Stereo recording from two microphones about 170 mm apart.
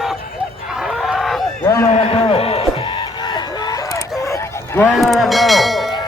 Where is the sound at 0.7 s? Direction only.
Centre (ahead or behind).